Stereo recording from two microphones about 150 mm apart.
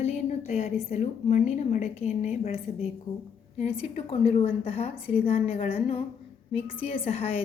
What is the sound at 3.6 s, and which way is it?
A woman's voice, 40° left (ahead or behind).